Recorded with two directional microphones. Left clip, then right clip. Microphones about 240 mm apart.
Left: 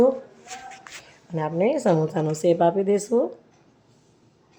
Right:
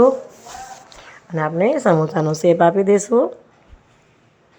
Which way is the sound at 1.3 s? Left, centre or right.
Centre.